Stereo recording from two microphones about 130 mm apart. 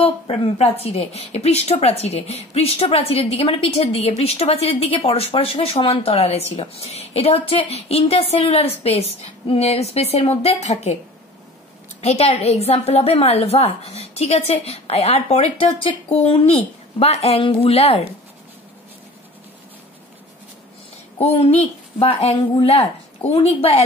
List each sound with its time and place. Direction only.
0.0 s a woman's voice: 55° left (ahead or behind)
12.0 s speech: 55° left (ahead or behind)
21.2 s speech: 50° left (ahead or behind)